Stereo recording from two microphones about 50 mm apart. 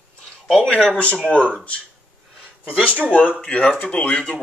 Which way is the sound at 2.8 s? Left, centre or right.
Right.